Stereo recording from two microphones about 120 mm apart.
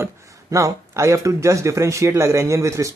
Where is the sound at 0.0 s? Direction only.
25° right (ahead or behind).